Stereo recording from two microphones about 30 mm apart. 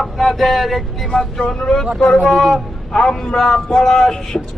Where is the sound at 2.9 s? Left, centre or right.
Left.